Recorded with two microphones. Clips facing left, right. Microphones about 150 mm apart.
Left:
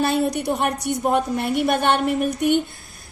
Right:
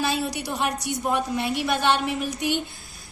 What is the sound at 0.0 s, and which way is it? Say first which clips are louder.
A woman's voice: left 6 dB; 55° left (ahead or behind).